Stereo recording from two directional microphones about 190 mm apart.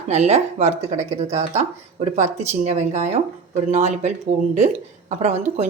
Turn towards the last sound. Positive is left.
turn(degrees=-35)  # may be behind; listen again after turning